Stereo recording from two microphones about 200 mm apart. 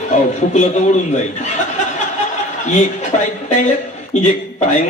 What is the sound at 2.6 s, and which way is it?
A man's voice, 35° left (ahead or behind).